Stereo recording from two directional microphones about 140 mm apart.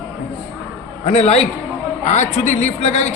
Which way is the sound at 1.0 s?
50° left (ahead or behind).